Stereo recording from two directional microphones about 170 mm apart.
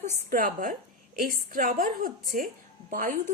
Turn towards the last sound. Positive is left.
turn(degrees=-55)  # may be behind; listen again after turning